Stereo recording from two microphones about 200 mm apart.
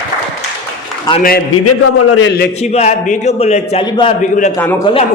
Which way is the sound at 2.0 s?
85° left.